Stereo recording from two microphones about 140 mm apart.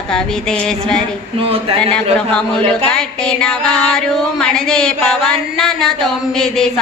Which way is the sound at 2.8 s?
5° left (ahead or behind).